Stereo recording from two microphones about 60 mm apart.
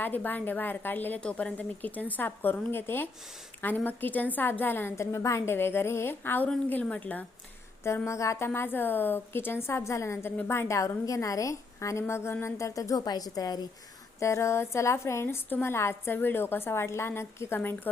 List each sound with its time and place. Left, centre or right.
0.0 s a woman's voice: left
1.2 s a woman's voice: centre; by 4.9 s left
4.9 s a woman's voice: left
5.5 s a woman's voice: left
6.7 s a woman's voice: left
8.0 s a woman's voice: left
10.8 s a woman's voice: left
14.2 s a woman's voice: left